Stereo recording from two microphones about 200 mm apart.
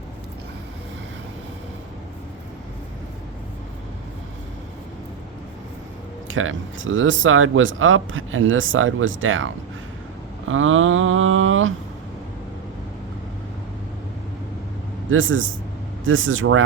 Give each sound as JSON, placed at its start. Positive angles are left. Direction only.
{"t": 6.2, "sound": "speech", "side_deg": -80}
{"t": 10.5, "sound": "speech", "side_deg": -80}
{"t": 15.1, "sound": "speech", "side_deg": -75}